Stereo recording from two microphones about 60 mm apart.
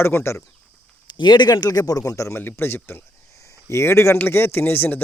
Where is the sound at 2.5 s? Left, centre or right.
Left.